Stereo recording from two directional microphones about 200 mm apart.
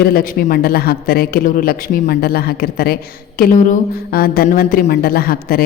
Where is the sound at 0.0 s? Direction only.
50° left (ahead or behind).